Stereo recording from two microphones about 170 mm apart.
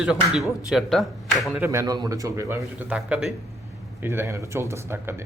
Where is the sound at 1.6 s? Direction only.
15° right (ahead or behind).